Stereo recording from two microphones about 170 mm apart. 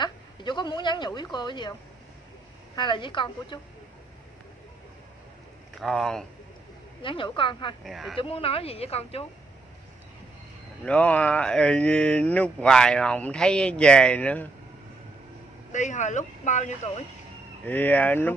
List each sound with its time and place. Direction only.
0.0 s a woman's voice: 25° left (ahead or behind)
5.8 s speech: centre (ahead or behind)
7.0 s a woman's voice: 30° left (ahead or behind)
7.8 s speech: centre (ahead or behind)
8.2 s speech: 35° left (ahead or behind)
10.8 s speech: 5° left (ahead or behind)
15.7 s speech: 45° left (ahead or behind)
17.6 s speech: 10° left (ahead or behind)